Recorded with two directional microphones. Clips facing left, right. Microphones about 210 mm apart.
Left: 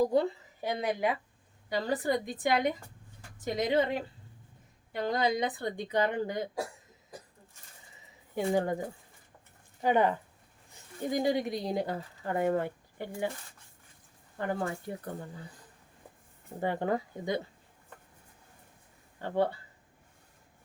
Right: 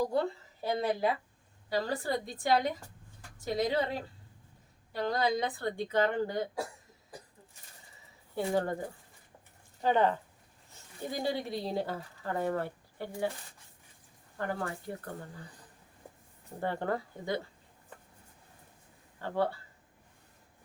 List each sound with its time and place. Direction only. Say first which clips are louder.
0.6 s a woman's voice: right 1 dB; 15° left (ahead or behind)
8.4 s speech: left 2 dB; 15° left (ahead or behind)
9.8 s speech: left 1 dB; 15° left (ahead or behind)
14.3 s a woman's voice: left 3 dB; 20° left (ahead or behind)
16.6 s speech: left 3 dB; 15° left (ahead or behind)
19.2 s a woman's voice: left 2 dB; 20° left (ahead or behind)